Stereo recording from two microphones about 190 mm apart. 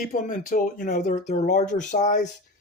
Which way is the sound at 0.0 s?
45° left (ahead or behind).